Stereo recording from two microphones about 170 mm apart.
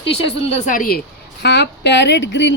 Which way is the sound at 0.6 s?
50° left (ahead or behind).